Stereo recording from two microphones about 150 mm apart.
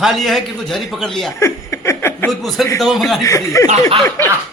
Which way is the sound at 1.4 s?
20° left (ahead or behind).